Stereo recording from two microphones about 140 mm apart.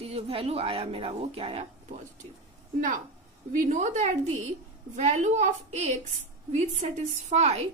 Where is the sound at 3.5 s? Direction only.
65° right (ahead or behind).